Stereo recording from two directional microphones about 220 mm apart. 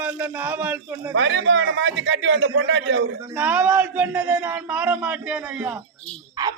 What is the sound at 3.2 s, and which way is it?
Speech, 10° right (ahead or behind).